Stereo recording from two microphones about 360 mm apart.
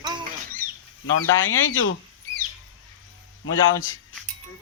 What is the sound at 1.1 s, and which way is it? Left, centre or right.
Speech, left.